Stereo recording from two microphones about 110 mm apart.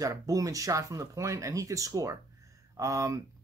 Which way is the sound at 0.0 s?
30° right (ahead or behind).